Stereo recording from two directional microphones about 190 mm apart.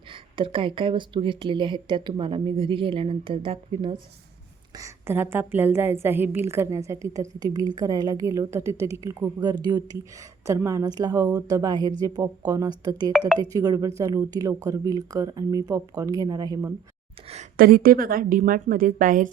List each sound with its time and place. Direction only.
0.1 s speech: 25° right (ahead or behind)
4.8 s a woman's voice: 10° right (ahead or behind)
13.1 s speech: 5° right (ahead or behind)
13.4 s speech: 20° right (ahead or behind)
17.6 s a woman's voice: 50° right (ahead or behind)